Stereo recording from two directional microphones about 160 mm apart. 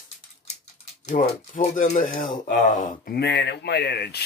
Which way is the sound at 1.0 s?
55° left (ahead or behind).